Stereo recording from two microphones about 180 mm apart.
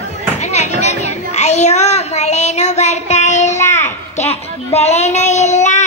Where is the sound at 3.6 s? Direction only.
15° left (ahead or behind).